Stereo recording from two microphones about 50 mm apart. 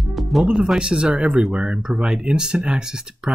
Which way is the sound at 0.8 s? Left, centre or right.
Centre.